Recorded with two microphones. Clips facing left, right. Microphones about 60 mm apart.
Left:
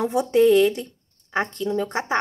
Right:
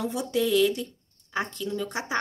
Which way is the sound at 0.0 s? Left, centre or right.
Left.